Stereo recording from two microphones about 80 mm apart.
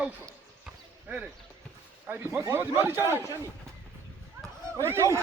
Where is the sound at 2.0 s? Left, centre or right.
Right.